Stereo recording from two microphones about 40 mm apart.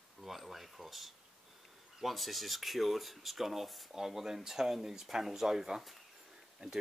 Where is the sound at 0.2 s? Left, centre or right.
Centre.